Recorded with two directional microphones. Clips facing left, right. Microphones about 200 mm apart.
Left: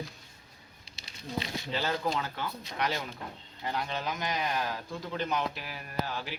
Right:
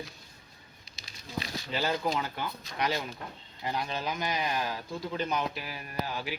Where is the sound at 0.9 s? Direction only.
30° left (ahead or behind).